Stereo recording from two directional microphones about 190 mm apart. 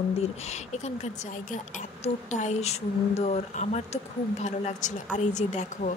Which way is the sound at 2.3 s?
35° left (ahead or behind).